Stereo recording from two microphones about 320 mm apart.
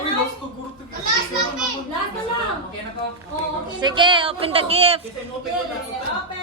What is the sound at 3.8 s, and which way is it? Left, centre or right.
A woman's voice, centre.